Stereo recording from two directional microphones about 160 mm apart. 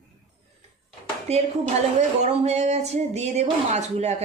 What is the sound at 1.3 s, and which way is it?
Speech, 40° right (ahead or behind).